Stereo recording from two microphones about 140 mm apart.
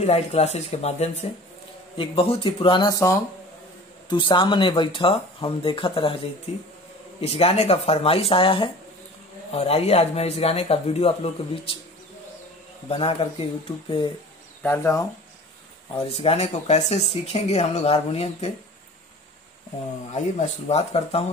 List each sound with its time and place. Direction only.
0.0 s speech: 50° left (ahead or behind)
2.0 s speech: 40° left (ahead or behind); by 3.2 s 25° left (ahead or behind)
4.1 s speech: 35° left (ahead or behind)
7.2 s speech: 45° left (ahead or behind)
12.9 s speech: 40° left (ahead or behind)
14.6 s speech: 20° left (ahead or behind)
16.1 s speech: 45° left (ahead or behind)
20.1 s speech: 55° left (ahead or behind)